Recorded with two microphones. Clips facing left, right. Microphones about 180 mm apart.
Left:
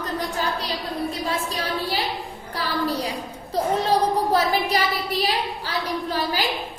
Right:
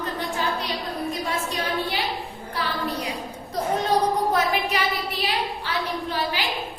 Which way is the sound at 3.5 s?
30° left (ahead or behind).